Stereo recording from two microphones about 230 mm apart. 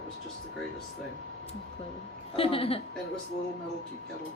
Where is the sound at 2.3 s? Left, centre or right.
Left.